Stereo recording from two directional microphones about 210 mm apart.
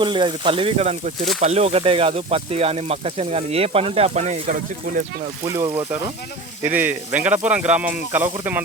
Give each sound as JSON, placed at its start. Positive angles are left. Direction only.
{"t": 0.0, "sound": "speech", "side_deg": -20}
{"t": 5.5, "sound": "speech", "side_deg": -10}